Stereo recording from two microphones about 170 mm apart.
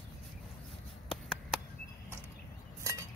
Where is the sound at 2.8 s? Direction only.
20° right (ahead or behind).